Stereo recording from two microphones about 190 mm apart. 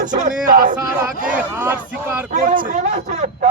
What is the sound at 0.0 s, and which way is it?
Speech, 40° right (ahead or behind).